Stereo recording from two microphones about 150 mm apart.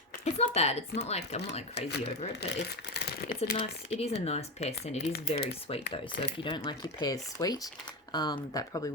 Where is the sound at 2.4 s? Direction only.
90° left.